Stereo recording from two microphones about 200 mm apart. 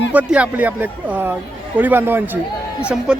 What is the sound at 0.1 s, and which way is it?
Speech, 5° right (ahead or behind).